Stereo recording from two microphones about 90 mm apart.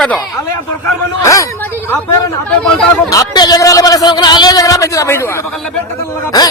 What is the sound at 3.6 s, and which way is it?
A man's voice, 40° left (ahead or behind).